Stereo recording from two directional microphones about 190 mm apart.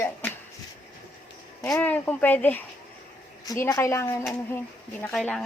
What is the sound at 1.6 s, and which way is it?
A woman's voice, 10° left (ahead or behind).